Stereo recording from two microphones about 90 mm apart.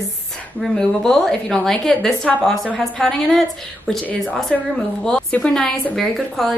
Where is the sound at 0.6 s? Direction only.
5° left (ahead or behind).